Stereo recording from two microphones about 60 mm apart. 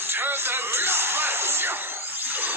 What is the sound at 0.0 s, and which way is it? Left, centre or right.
Speech, right.